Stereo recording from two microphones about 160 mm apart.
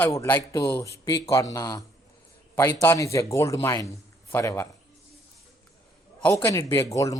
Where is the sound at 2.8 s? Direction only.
15° left (ahead or behind).